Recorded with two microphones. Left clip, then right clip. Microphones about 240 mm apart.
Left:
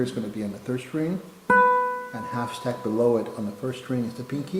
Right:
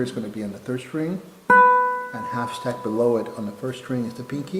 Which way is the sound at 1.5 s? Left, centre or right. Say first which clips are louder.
Right 4 dB; centre.